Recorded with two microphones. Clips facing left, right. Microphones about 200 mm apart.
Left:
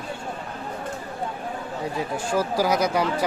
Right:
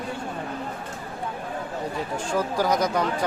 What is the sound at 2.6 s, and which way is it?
Speech, 10° left (ahead or behind).